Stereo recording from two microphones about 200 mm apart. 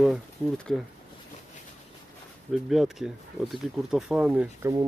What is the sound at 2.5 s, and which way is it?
Speech, centre (ahead or behind).